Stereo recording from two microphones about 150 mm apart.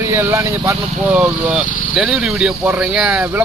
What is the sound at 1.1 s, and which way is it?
Speech, 5° right (ahead or behind).